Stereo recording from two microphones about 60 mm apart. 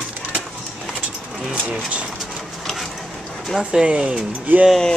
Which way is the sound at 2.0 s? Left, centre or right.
Centre.